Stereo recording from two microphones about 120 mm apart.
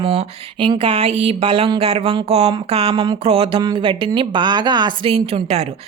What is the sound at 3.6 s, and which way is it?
A woman's voice, 40° right (ahead or behind).